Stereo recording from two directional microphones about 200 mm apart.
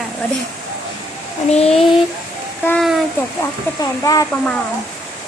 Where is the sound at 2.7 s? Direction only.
5° left (ahead or behind).